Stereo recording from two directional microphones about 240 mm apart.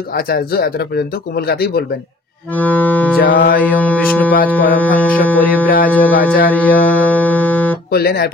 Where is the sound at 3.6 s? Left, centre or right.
Centre.